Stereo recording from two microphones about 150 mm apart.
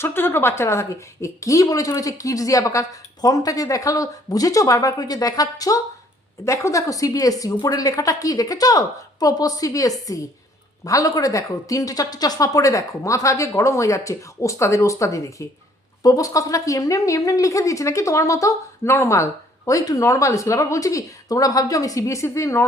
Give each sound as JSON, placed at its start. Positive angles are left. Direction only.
{"t": 0.0, "sound": "a woman's voice", "side_deg": 15}